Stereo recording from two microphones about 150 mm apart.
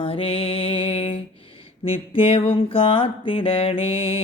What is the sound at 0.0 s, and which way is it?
Music, 40° left (ahead or behind).